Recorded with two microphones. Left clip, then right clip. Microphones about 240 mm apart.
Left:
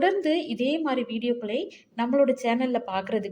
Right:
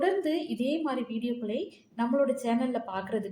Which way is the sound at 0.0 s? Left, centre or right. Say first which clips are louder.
Left 4 dB; left.